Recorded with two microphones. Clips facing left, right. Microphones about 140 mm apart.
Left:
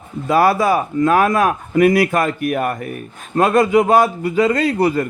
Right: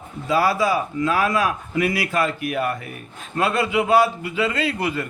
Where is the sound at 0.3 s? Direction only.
55° left (ahead or behind).